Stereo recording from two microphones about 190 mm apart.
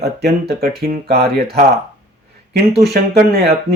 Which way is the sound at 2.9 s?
55° right (ahead or behind).